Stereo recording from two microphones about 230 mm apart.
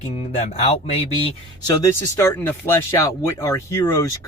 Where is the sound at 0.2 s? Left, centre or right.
Left.